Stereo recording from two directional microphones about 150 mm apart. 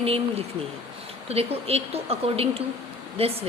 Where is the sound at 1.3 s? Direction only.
40° right (ahead or behind).